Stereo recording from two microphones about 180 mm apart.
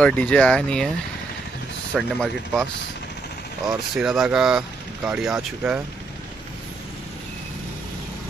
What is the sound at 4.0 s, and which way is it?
Speech, centre (ahead or behind).